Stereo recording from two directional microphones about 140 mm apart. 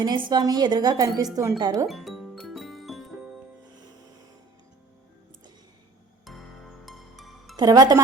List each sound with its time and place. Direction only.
0.0 s speech: 30° right (ahead or behind)
1.9 s music: centre (ahead or behind)
6.2 s music: centre (ahead or behind)
7.5 s a woman's voice: 30° right (ahead or behind)